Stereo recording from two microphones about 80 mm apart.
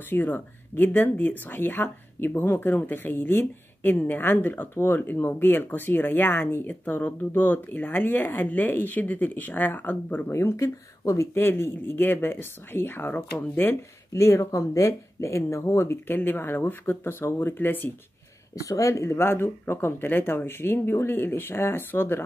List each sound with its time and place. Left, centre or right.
0.1 s speech: left
10.3 s speech: left
18.6 s speech: left